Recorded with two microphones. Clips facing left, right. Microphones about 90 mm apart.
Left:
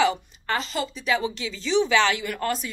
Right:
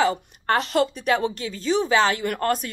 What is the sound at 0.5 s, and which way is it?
A woman's voice, 60° right (ahead or behind).